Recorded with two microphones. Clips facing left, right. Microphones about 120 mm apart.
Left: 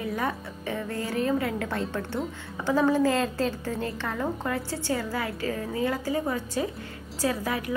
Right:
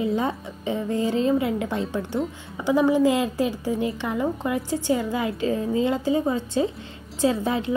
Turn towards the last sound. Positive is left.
turn(degrees=-25)  # may be behind; listen again after turning